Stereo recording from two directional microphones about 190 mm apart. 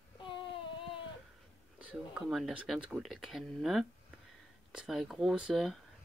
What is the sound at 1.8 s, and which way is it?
Speech, 5° right (ahead or behind).